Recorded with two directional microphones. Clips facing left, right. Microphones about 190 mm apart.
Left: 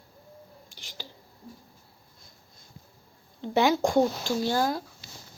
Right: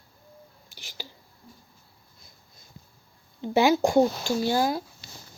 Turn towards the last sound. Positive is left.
turn(degrees=-5)  # may be behind; listen again after turning